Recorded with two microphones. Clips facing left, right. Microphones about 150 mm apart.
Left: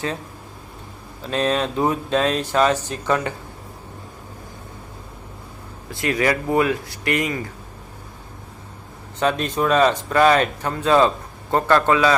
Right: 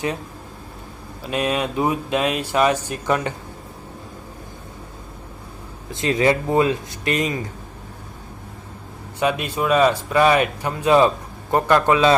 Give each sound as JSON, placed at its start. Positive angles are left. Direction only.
{"t": 1.3, "sound": "speech", "side_deg": -10}
{"t": 5.9, "sound": "speech", "side_deg": -20}
{"t": 9.2, "sound": "speech", "side_deg": -10}